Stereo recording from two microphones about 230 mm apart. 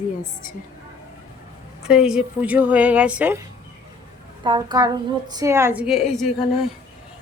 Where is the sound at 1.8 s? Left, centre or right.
Centre.